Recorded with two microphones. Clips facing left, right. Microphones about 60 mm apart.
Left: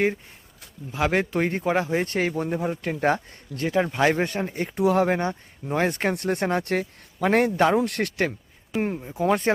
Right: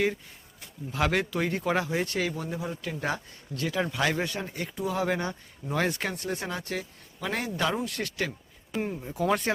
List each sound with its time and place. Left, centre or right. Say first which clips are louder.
0.9 s speech: left 3 dB; left
1.2 s speech: left 4 dB; left
4.7 s speech: left 10 dB; left
5.0 s speech: left 5 dB; left
6.1 s a man's voice: left 9 dB; left
9.1 s speech: left 4 dB; left